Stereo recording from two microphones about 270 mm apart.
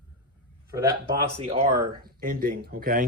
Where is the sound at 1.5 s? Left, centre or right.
Right.